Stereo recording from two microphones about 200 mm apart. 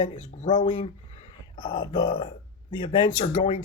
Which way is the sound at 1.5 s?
25° left (ahead or behind).